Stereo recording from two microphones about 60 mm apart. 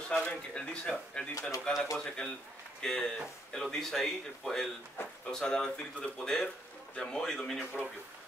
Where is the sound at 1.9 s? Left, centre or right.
Centre.